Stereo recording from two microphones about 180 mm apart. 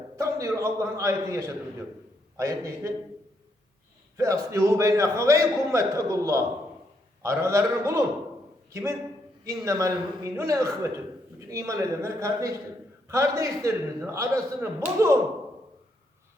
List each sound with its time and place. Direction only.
0.2 s a man's voice: 15° right (ahead or behind)
4.2 s a man's voice: 15° right (ahead or behind)